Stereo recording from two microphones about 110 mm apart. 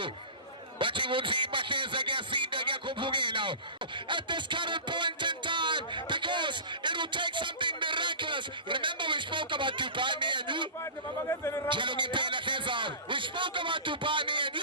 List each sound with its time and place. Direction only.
0.8 s a man's voice: 50° right (ahead or behind)
3.9 s a sound: 45° right (ahead or behind)
11.3 s a man's voice: 25° left (ahead or behind)
11.7 s a man's voice: 50° right (ahead or behind)